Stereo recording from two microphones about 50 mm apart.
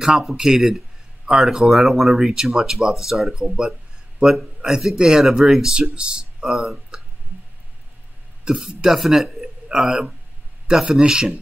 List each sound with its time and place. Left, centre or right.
0.0 s speech: centre
6.5 s speech: centre
8.5 s a man's voice: centre